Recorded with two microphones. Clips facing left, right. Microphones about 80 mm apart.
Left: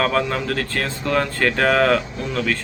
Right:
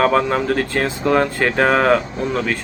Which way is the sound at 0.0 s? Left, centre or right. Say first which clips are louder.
Right 4 dB; centre.